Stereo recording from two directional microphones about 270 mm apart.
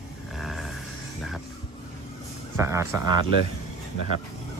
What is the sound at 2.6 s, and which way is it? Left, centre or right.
Speech, centre.